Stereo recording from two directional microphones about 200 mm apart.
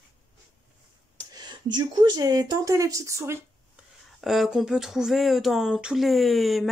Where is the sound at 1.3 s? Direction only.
20° right (ahead or behind).